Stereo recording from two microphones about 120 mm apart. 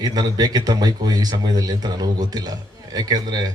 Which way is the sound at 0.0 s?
35° right (ahead or behind).